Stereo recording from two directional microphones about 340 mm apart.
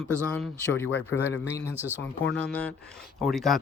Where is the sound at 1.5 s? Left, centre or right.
Centre.